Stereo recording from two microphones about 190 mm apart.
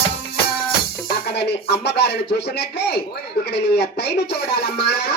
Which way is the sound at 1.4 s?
60° left (ahead or behind).